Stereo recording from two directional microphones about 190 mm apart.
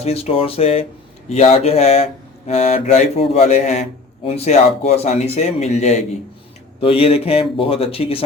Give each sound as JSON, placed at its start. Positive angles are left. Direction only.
{"t": 0.0, "sound": "speech", "side_deg": 30}